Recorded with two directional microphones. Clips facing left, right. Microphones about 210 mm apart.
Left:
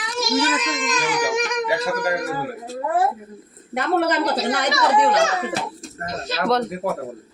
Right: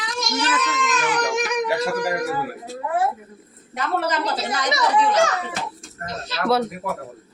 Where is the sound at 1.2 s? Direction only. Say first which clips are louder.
Even; centre (ahead or behind).